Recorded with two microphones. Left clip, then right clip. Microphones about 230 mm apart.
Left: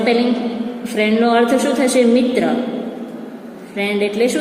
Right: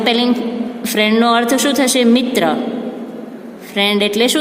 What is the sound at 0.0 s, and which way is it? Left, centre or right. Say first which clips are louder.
A man's voice: right 1 dB; right.